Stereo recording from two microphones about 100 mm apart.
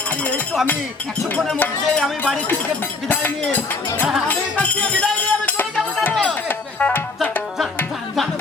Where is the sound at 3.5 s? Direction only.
20° left (ahead or behind).